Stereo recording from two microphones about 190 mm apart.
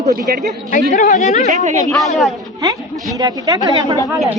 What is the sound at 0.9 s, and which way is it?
Speech, 45° left (ahead or behind).